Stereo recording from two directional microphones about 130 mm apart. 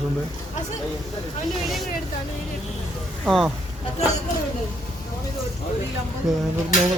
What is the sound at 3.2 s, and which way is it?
Speech, centre (ahead or behind).